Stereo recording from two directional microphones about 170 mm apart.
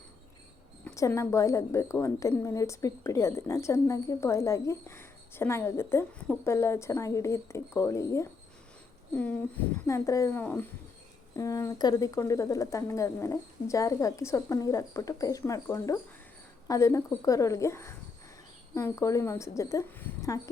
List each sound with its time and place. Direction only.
0.9 s a woman's voice: 15° left (ahead or behind)